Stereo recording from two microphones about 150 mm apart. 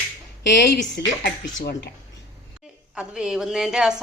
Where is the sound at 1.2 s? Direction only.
75° left (ahead or behind).